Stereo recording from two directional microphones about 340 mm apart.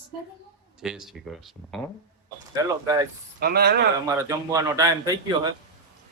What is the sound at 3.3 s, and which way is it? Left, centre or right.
Speech, right.